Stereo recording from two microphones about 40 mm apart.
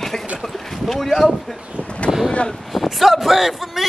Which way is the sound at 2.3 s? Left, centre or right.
Left.